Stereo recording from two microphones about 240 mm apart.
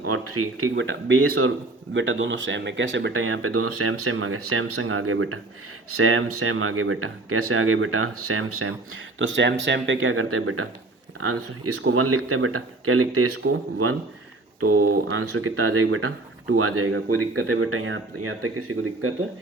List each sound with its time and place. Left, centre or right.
0.0 s speech: right
15.1 s speech: right